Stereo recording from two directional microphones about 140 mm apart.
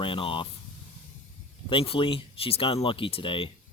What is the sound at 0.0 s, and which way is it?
Speech, 40° left (ahead or behind).